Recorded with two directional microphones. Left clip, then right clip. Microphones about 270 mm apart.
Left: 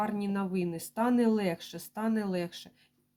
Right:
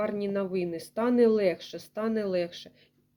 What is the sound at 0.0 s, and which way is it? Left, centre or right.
Speech, left.